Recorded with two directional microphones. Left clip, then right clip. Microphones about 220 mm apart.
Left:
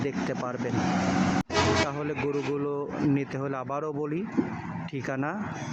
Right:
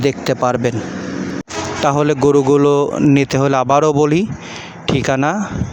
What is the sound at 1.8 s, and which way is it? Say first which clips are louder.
Speech: right 17 dB; 45° right (ahead or behind).